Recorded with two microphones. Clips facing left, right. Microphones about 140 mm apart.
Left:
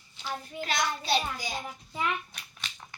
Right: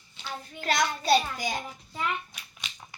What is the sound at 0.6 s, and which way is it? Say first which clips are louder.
Speech: right 4 dB; 45° right (ahead or behind).